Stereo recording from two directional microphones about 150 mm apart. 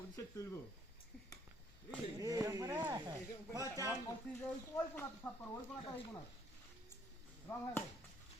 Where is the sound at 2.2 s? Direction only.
25° right (ahead or behind).